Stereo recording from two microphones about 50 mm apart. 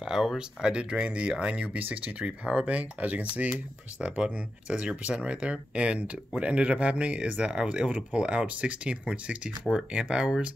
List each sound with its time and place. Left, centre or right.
0.0 s speech: centre